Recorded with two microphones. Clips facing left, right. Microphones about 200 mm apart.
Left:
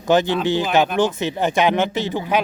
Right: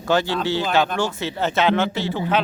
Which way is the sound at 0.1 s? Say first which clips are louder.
Left 3 dB; 20° left (ahead or behind).